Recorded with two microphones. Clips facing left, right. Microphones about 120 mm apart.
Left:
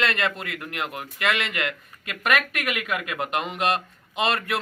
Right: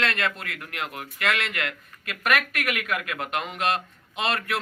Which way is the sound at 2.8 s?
10° left (ahead or behind).